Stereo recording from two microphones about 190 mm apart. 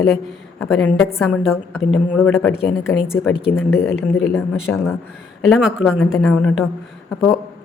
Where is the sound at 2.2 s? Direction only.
10° left (ahead or behind).